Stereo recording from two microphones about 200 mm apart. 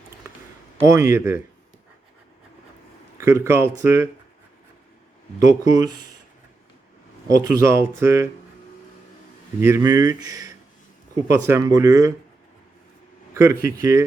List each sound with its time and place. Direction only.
0.8 s speech: 15° right (ahead or behind)
3.2 s speech: 15° right (ahead or behind)
5.5 s speech: 20° right (ahead or behind)
7.3 s speech: 15° right (ahead or behind)
9.6 s speech: 15° right (ahead or behind)
13.3 s speech: 15° right (ahead or behind)